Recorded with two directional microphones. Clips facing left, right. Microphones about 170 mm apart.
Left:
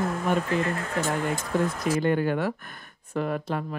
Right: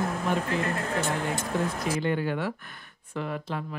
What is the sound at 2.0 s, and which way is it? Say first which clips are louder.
Speech: left 5 dB; 50° left (ahead or behind).